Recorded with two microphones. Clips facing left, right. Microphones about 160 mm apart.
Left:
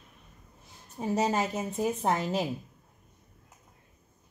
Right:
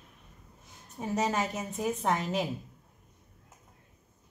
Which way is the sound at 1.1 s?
35° left (ahead or behind).